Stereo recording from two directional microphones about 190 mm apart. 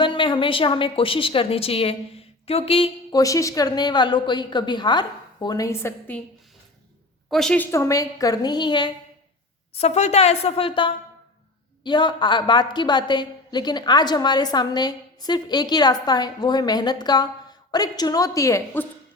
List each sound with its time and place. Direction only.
0.0 s a woman's voice: 25° left (ahead or behind)
3.2 s a woman's voice: 15° left (ahead or behind)
7.3 s a woman's voice: centre (ahead or behind); by 8.9 s 25° left (ahead or behind)
9.7 s a woman's voice: 35° left (ahead or behind); by 18.9 s 15° left (ahead or behind)